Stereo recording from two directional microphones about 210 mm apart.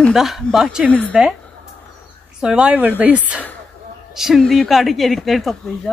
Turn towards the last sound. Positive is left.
turn(degrees=0)  # may be behind; listen again after turning